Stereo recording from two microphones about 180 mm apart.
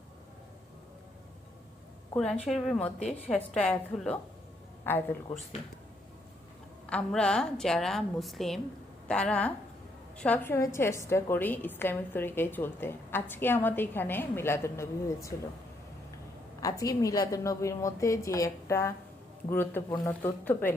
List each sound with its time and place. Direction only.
2.1 s a woman's voice: 5° left (ahead or behind)
6.8 s a woman's voice: 5° left (ahead or behind)
16.6 s a woman's voice: 20° left (ahead or behind)